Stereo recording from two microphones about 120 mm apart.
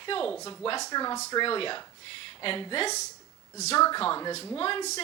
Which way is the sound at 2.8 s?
70° left (ahead or behind).